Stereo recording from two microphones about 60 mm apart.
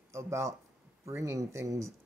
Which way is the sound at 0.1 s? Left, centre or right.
Right.